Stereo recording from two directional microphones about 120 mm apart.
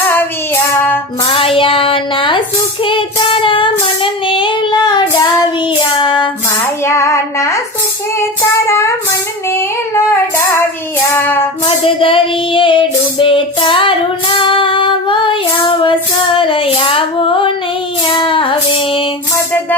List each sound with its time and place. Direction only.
0.1 s child singing: 15° left (ahead or behind)
1.3 s child singing: 50° left (ahead or behind)
3.4 s child singing: 45° left (ahead or behind)
6.8 s child singing: 25° left (ahead or behind)
8.6 s a sound: 25° left (ahead or behind)
9.5 s child singing: 20° left (ahead or behind)
11.8 s child singing: 50° left (ahead or behind)
14.4 s female singing: 45° left (ahead or behind)
18.1 s music: 45° left (ahead or behind)